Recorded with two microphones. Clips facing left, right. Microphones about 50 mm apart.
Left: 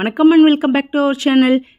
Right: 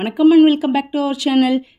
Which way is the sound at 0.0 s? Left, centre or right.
Left.